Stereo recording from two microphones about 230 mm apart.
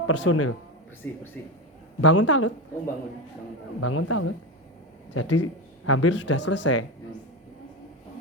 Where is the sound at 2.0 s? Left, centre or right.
Left.